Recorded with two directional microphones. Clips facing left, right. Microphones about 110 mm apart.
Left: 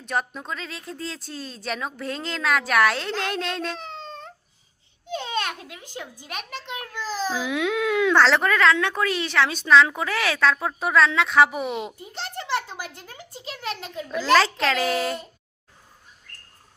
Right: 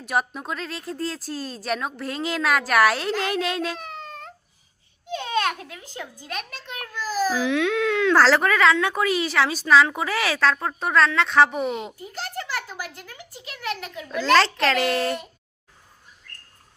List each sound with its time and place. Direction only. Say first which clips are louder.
0.0 s speech: right 2 dB; 5° right (ahead or behind)
3.8 s a sound: even; 30° left (ahead or behind)
5.2 s a child's voice: right 6 dB; 20° left (ahead or behind)
7.3 s speech: right 3 dB; 5° left (ahead or behind)
12.1 s a sound: left 3 dB; 30° left (ahead or behind)
14.3 s speech: even; centre (ahead or behind)